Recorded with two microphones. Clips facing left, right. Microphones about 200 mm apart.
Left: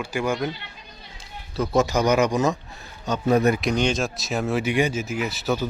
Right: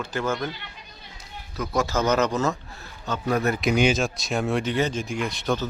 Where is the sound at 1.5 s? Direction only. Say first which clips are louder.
Left 4 dB; 20° left (ahead or behind).